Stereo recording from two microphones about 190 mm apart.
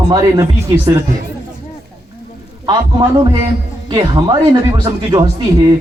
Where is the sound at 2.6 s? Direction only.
25° right (ahead or behind).